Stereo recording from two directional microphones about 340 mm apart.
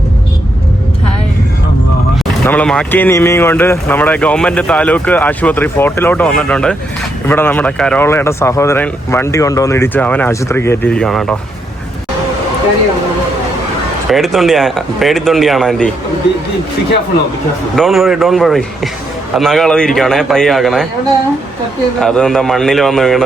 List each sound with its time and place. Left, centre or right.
2.5 s speech: centre
14.1 s speech: centre
17.7 s speech: centre
22.0 s speech: centre